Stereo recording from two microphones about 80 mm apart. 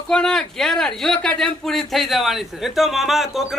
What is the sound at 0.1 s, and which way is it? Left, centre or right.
Speech, centre.